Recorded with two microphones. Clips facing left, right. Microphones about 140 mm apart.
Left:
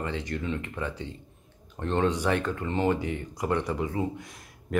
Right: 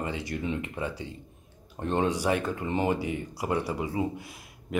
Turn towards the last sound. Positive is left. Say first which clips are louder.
# left 1 dB
turn(degrees=-5)  # may be behind; listen again after turning